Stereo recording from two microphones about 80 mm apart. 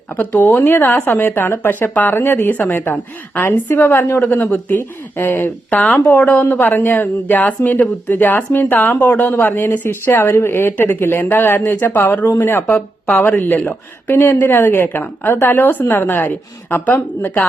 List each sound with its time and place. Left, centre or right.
0.2 s speech: left